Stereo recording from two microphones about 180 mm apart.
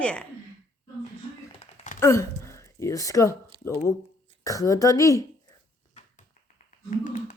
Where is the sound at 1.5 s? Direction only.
35° left (ahead or behind).